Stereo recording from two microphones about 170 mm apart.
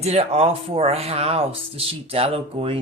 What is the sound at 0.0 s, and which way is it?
Speech, 40° right (ahead or behind).